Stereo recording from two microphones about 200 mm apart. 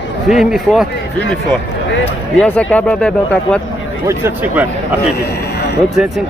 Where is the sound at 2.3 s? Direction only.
5° left (ahead or behind).